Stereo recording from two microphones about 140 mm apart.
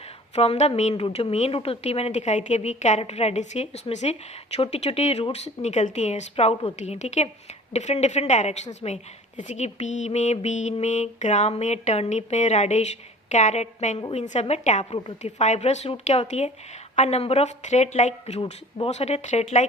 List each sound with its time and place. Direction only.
0.3 s a woman's voice: 50° left (ahead or behind)
6.7 s a woman's voice: 55° left (ahead or behind)
7.7 s a sound: 55° left (ahead or behind)
14.1 s a woman's voice: 50° left (ahead or behind)
15.2 s a sound: 55° left (ahead or behind)
18.8 s a woman's voice: 50° left (ahead or behind)